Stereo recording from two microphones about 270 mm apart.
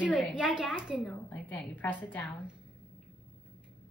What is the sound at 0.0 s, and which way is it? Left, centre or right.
A woman's voice, centre.